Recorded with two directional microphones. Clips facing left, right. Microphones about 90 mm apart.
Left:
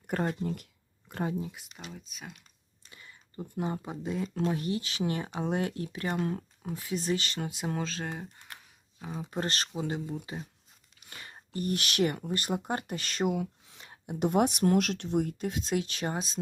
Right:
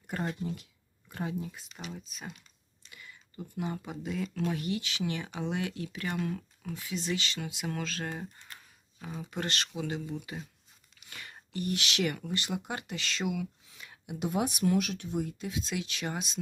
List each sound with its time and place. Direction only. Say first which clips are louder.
0.1 s a sound: left 4 dB; 45° left (ahead or behind)
1.1 s speech: left 3 dB; 40° left (ahead or behind)
1.4 s speech: left 2 dB; 15° left (ahead or behind)
1.9 s speech: right 3 dB; centre (ahead or behind)
2.8 s a sound: right 1 dB; 30° left (ahead or behind)
3.6 s speech: left 2 dB; 30° left (ahead or behind)
7.7 s speech: left 1 dB; 25° left (ahead or behind)
9.2 s speech: left 2 dB; 30° left (ahead or behind)
11.1 s a sound: even; 25° left (ahead or behind)
11.5 s speech: left 2 dB; 40° left (ahead or behind)
14.2 s speech: left 5 dB; 60° left (ahead or behind); by 16.4 s 35° left (ahead or behind)